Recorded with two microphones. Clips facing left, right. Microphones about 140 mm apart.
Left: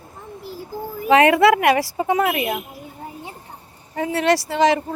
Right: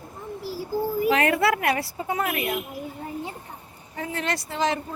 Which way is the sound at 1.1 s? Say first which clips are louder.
Left 10 dB; 90° left.